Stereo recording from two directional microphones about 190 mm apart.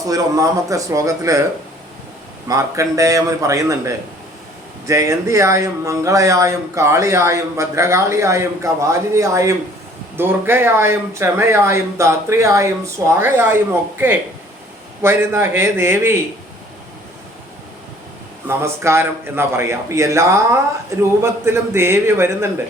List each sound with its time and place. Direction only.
0.1 s speech: 15° right (ahead or behind)
2.5 s speech: 15° right (ahead or behind)
18.4 s speech: 15° right (ahead or behind)